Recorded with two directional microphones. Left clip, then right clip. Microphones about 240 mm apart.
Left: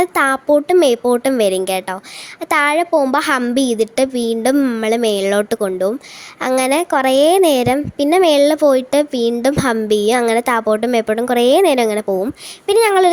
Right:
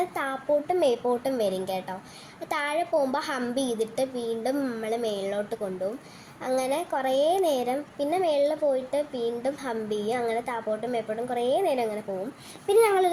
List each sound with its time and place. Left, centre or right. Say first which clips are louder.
0.0 s a woman's voice: left 14 dB; left